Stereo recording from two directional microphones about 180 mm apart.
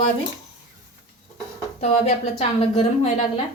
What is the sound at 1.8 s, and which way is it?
A woman's voice, 35° left (ahead or behind).